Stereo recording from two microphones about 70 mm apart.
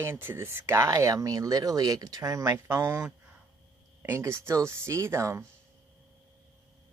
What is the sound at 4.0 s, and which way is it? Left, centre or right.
Speech, right.